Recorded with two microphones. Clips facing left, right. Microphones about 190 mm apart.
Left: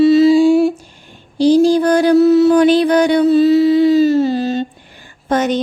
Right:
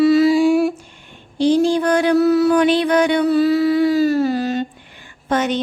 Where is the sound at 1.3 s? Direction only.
35° left (ahead or behind).